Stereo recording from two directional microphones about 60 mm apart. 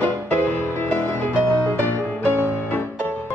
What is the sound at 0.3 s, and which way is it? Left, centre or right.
Music, left.